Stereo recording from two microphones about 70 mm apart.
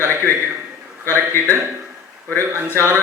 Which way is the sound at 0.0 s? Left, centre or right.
Right.